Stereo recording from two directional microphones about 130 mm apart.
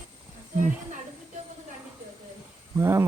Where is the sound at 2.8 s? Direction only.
20° right (ahead or behind).